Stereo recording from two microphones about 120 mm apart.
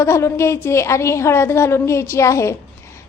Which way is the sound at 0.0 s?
25° left (ahead or behind).